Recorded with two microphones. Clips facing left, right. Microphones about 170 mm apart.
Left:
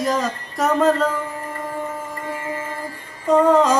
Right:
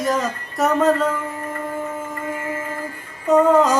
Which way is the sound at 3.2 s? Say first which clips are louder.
Even; 5° right (ahead or behind).